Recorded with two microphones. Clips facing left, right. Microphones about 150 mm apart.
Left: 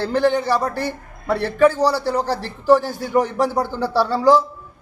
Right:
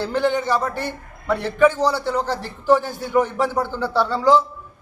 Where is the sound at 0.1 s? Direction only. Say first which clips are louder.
Left 3 dB; 10° left (ahead or behind).